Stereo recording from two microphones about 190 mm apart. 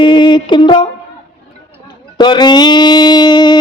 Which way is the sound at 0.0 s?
25° left (ahead or behind).